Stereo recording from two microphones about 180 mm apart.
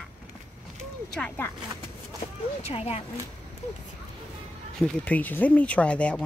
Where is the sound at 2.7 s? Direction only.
35° left (ahead or behind).